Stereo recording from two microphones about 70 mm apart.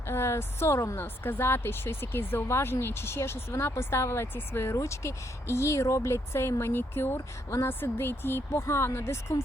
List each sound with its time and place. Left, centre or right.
0.1 s speech: left
1.0 s speech: left